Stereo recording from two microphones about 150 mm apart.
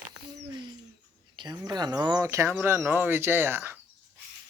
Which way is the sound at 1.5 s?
25° right (ahead or behind).